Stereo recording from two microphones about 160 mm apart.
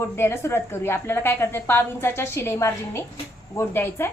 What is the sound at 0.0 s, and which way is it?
A woman's voice, 15° left (ahead or behind).